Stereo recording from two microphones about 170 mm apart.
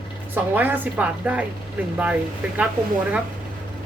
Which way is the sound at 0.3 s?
10° right (ahead or behind).